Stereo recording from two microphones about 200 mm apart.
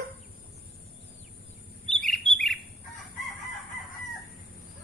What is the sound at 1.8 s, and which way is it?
Chirp, 5° left (ahead or behind).